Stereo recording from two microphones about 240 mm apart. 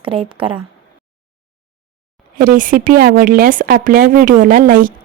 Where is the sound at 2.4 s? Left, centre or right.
Right.